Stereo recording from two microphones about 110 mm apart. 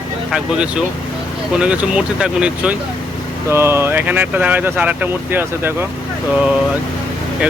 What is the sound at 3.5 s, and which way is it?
Speech, 25° right (ahead or behind).